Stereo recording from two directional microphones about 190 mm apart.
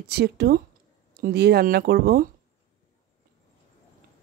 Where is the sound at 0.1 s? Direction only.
55° right (ahead or behind).